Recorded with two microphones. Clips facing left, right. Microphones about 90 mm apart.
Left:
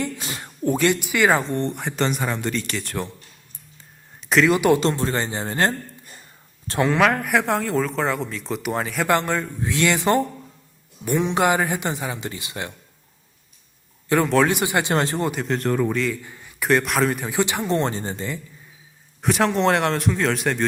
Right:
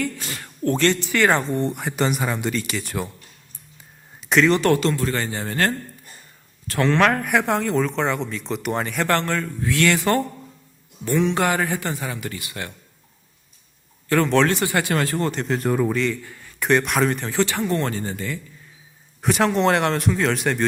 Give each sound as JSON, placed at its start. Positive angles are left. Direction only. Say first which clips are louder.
{"t": 0.0, "sound": "music", "louder": "right 1 dB", "side_deg": 20}
{"t": 0.7, "sound": "speech", "louder": "even", "side_deg": 10}
{"t": 4.2, "sound": "speech", "louder": "even", "side_deg": 0}
{"t": 4.8, "sound": "speech", "louder": "even", "side_deg": 25}
{"t": 6.8, "sound": "speech", "louder": "right 1 dB", "side_deg": 5}
{"t": 9.0, "sound": "speech", "louder": "left 3 dB", "side_deg": 15}
{"t": 14.1, "sound": "speech", "louder": "even", "side_deg": 20}
{"t": 15.3, "sound": "speech", "louder": "even", "side_deg": 0}
{"t": 16.2, "sound": "a sound", "louder": "even", "side_deg": 20}
{"t": 16.6, "sound": "speech", "louder": "even", "side_deg": 0}
{"t": 17.2, "sound": "speech", "louder": "right 1 dB", "side_deg": 15}
{"t": 19.2, "sound": "speech", "louder": "even", "side_deg": 0}